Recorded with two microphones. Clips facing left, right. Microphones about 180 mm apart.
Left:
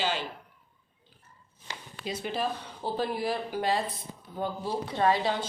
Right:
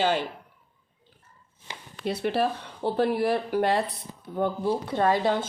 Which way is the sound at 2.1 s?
65° right (ahead or behind).